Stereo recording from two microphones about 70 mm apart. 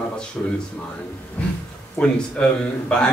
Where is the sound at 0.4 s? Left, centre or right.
Centre.